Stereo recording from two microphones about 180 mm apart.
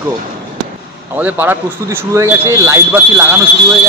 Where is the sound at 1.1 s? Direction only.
10° right (ahead or behind).